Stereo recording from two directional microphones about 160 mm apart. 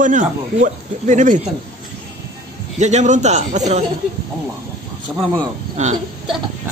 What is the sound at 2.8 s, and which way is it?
Speech, 45° right (ahead or behind).